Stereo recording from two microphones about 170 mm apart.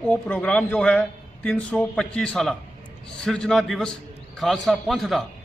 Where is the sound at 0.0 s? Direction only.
5° left (ahead or behind).